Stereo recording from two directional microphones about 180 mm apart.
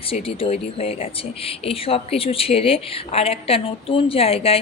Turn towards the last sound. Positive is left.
turn(degrees=35)  # may be behind; listen again after turning